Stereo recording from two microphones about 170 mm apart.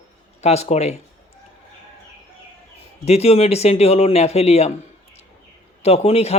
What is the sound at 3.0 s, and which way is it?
Speech, 40° left (ahead or behind).